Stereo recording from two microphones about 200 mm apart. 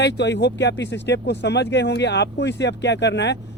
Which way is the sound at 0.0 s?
60° left (ahead or behind).